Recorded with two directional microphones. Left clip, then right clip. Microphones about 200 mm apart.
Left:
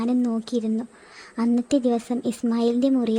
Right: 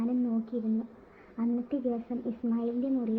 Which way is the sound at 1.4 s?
50° left (ahead or behind).